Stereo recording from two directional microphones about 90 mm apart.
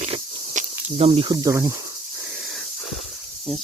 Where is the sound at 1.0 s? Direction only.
90° right.